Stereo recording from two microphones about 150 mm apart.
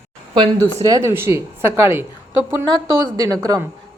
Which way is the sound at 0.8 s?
20° right (ahead or behind).